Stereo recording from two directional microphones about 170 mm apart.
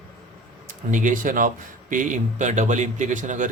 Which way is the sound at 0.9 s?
50° right (ahead or behind).